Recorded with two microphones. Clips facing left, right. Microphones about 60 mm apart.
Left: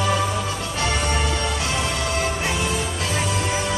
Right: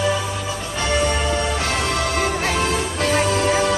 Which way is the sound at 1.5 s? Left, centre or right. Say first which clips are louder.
Right 3 dB; right.